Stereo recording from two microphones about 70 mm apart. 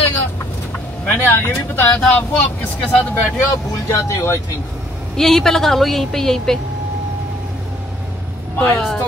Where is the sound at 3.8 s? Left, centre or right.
Left.